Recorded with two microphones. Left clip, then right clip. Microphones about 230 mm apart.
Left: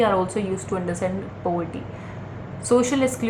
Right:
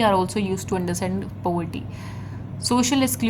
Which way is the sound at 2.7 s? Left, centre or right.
Right.